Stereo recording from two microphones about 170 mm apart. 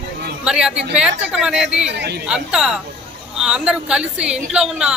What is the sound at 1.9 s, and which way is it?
Speech, 85° right.